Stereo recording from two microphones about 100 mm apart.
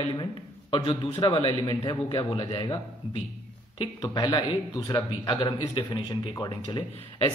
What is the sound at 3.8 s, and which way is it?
A man's voice, 45° left (ahead or behind).